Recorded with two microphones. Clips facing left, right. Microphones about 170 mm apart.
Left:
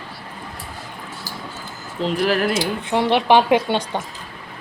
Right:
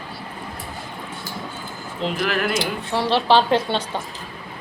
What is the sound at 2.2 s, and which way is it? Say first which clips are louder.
Speech: left 4 dB; 35° left (ahead or behind).